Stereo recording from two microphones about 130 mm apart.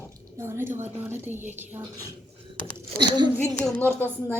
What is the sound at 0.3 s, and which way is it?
A woman's voice, 20° right (ahead or behind).